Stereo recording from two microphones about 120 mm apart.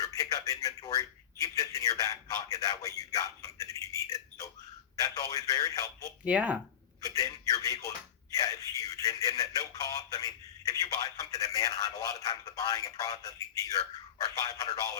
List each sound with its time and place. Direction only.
0.0 s speech: 30° left (ahead or behind)
6.2 s speech: 10° right (ahead or behind)
7.0 s speech: 30° left (ahead or behind)